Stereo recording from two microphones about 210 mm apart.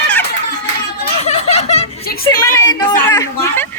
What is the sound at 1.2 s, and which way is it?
Chuckle, 30° left (ahead or behind).